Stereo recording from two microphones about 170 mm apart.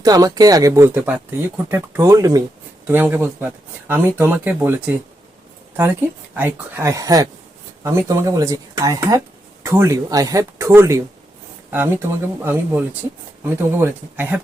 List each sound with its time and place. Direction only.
0.0 s speech: 20° right (ahead or behind)
6.3 s speech: 10° right (ahead or behind)